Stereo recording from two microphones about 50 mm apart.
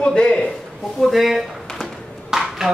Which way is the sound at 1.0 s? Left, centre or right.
Centre.